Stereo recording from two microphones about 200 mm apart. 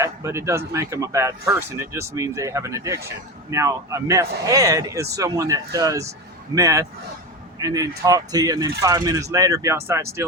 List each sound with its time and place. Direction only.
0.0 s speech: 15° right (ahead or behind)